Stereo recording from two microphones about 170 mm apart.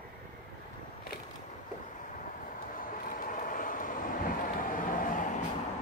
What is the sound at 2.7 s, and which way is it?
Vehicle, 55° left (ahead or behind).